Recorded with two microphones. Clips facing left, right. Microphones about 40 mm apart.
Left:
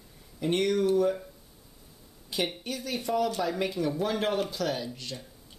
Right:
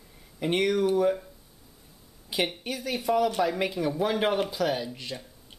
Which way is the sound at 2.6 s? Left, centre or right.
Centre.